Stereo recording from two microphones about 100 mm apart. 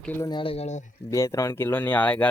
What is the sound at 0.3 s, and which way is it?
Speech, 50° left (ahead or behind).